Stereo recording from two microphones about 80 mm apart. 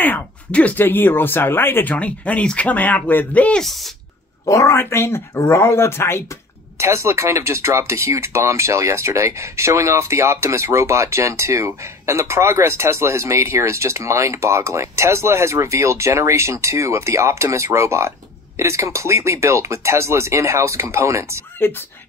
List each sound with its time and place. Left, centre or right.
0.0 s speech: centre
2.0 s speech: centre
3.6 s speech: centre
4.5 s speech: left
6.8 s speech: right
21.5 s speech: left